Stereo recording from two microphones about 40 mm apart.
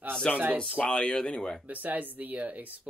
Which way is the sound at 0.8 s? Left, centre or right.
Left.